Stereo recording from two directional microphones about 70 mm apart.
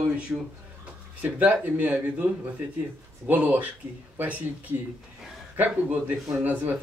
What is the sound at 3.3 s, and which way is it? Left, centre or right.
Speech, right.